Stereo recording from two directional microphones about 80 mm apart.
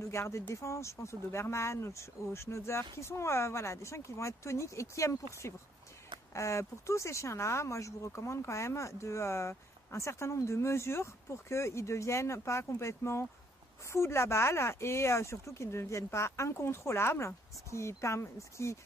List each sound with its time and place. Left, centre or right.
0.0 s speech: left